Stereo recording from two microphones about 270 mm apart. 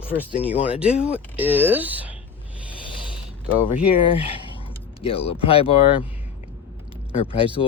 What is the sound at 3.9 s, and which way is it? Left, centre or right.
Speech, left.